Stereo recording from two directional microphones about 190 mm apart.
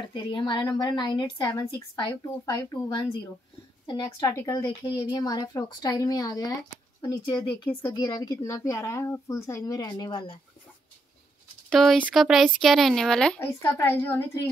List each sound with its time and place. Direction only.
0.1 s a woman's voice: 25° left (ahead or behind)
11.7 s a woman's voice: centre (ahead or behind)